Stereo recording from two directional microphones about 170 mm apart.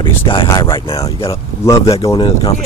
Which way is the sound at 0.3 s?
25° left (ahead or behind).